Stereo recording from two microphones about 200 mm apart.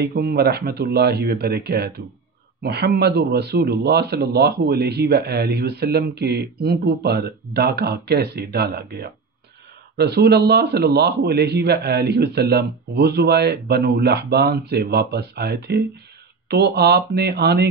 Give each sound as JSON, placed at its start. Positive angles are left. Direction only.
{"t": 0.0, "sound": "a man's voice", "side_deg": -50}